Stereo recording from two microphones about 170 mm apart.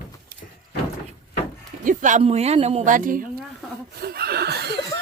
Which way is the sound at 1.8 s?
45° right (ahead or behind).